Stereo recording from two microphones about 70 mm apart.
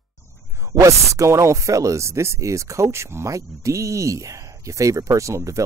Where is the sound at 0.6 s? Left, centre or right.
Right.